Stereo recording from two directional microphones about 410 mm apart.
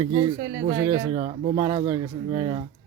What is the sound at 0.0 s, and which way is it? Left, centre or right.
Speech, centre.